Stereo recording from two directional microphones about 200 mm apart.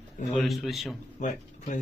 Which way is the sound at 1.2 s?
40° left (ahead or behind).